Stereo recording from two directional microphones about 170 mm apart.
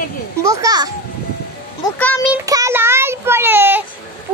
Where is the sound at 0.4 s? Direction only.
20° right (ahead or behind).